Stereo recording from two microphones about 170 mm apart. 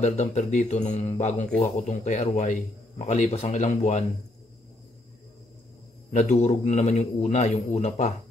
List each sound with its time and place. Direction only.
0.0 s speech: 40° left (ahead or behind)
6.1 s a man's voice: 40° left (ahead or behind)